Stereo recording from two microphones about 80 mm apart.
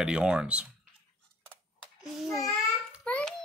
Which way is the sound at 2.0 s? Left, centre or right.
Centre.